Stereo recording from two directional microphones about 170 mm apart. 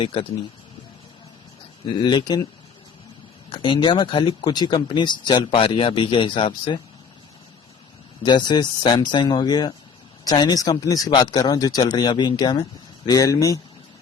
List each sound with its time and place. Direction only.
0.0 s speech: 30° left (ahead or behind)
2.0 s speech: 25° left (ahead or behind)
3.5 s speech: 30° left (ahead or behind)
8.2 s speech: 25° left (ahead or behind)